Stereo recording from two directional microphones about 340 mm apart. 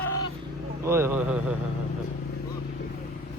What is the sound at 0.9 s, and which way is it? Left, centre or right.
Speech, centre.